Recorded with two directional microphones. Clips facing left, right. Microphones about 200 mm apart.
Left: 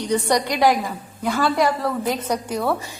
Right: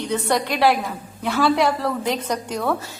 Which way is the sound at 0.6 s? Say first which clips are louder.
Right 1 dB; 10° left (ahead or behind).